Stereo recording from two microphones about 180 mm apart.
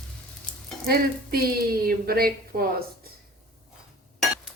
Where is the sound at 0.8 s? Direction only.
55° right (ahead or behind).